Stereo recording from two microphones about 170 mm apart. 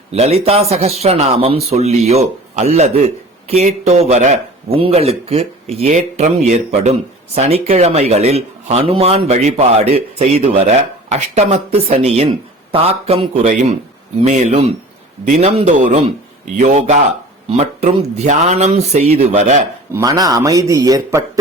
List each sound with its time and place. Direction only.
0.1 s speech: 35° right (ahead or behind)
19.9 s a man's voice: 20° right (ahead or behind)